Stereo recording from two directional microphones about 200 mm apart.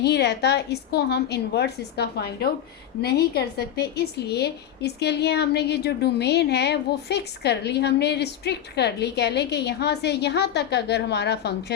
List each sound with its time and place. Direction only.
0.0 s a woman's voice: 55° left (ahead or behind)